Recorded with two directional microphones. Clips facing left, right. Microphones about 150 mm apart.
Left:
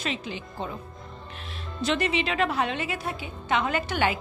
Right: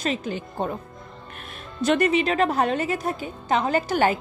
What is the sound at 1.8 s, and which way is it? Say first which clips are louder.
A woman's voice: right 6 dB; 50° right (ahead or behind).